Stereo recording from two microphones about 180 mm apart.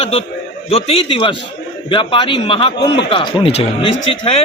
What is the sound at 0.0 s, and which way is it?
A man's voice, 30° left (ahead or behind).